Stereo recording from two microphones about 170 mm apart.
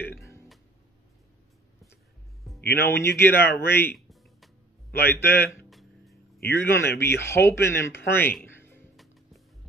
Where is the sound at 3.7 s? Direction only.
15° left (ahead or behind).